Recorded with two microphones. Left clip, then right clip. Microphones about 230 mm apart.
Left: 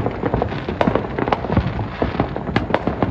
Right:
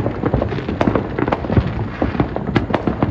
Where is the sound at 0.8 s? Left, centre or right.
Left.